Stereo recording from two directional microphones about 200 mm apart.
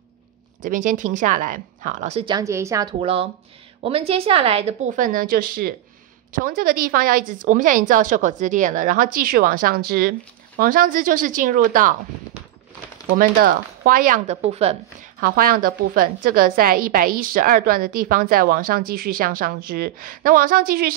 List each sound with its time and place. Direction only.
0.7 s a woman's voice: 40° right (ahead or behind)
2.3 s speech: 15° right (ahead or behind)
3.0 s a woman's voice: 30° right (ahead or behind)
13.2 s a woman's voice: 45° right (ahead or behind)
15.1 s a woman's voice: 45° right (ahead or behind)